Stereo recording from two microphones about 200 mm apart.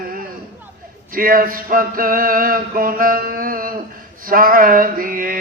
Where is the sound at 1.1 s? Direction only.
45° right (ahead or behind).